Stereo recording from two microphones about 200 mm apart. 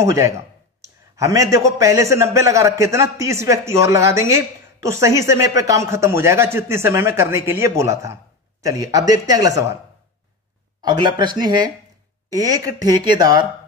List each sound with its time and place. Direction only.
0.0 s speech: 15° right (ahead or behind)
10.8 s speech: 20° right (ahead or behind)